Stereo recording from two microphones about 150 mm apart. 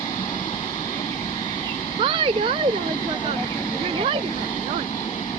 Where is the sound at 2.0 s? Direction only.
35° right (ahead or behind).